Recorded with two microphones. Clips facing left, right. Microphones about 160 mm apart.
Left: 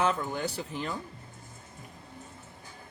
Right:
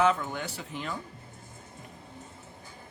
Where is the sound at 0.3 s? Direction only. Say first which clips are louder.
Left 4 dB; 35° left (ahead or behind).